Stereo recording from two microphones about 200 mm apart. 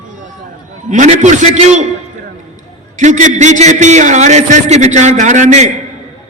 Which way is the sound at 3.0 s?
35° right (ahead or behind).